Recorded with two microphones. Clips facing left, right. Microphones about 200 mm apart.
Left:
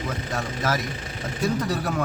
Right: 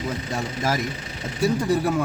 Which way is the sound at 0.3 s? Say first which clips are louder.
Right 1 dB; 10° right (ahead or behind).